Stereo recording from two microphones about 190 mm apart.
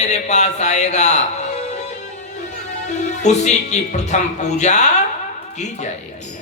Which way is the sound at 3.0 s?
40° left (ahead or behind).